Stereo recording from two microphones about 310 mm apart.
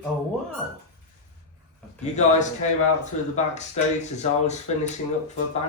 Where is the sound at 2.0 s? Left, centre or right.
Left.